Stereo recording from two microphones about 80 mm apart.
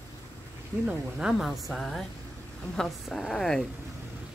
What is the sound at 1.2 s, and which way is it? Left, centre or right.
Speech, centre.